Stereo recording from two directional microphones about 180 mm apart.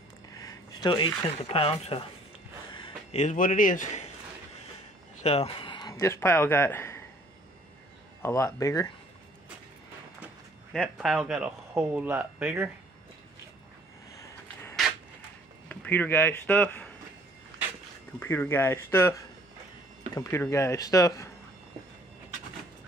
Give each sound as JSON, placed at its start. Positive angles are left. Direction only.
{"t": 0.4, "sound": "speech", "side_deg": 20}
{"t": 2.7, "sound": "a sound", "side_deg": 25}
{"t": 3.2, "sound": "a man's voice", "side_deg": 45}
{"t": 5.2, "sound": "speech", "side_deg": 35}
{"t": 8.2, "sound": "speech", "side_deg": 15}
{"t": 10.2, "sound": "speech", "side_deg": -5}
{"t": 14.2, "sound": "a sound", "side_deg": 15}
{"t": 15.7, "sound": "speech", "side_deg": 10}
{"t": 18.2, "sound": "speech", "side_deg": 10}